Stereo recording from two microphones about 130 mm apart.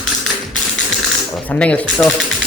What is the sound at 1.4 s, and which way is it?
Speech, 10° left (ahead or behind).